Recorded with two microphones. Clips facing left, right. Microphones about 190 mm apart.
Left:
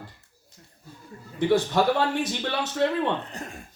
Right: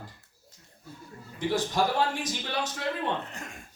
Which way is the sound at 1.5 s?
65° left (ahead or behind).